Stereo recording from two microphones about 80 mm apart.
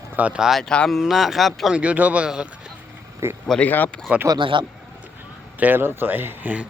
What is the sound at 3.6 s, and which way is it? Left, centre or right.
Speech, left.